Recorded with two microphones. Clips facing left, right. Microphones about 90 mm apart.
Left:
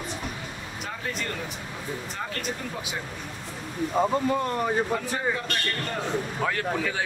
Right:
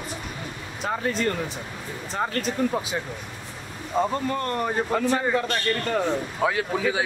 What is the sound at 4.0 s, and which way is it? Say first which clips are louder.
Speech: even; 10° left (ahead or behind).